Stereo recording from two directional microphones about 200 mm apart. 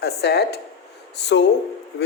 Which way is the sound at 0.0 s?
55° left (ahead or behind).